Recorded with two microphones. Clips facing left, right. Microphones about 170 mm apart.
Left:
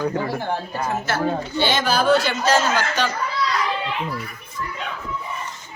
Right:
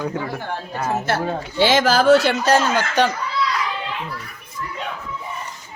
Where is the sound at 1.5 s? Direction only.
90° right; by 3.1 s 60° right (ahead or behind).